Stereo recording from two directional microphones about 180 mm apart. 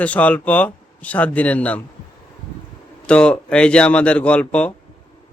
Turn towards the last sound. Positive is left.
turn(degrees=5)  # may be behind; listen again after turning